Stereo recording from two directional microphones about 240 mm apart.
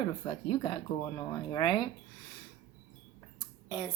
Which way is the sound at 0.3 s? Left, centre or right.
Centre.